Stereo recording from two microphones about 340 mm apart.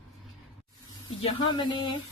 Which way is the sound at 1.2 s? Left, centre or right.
Centre.